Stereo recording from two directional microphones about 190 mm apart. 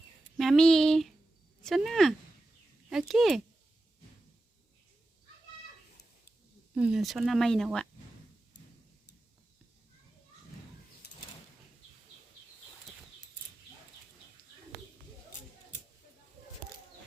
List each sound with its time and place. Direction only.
0.3 s speech: centre (ahead or behind)
6.7 s speech: 5° right (ahead or behind)
11.0 s a sound: 60° left (ahead or behind)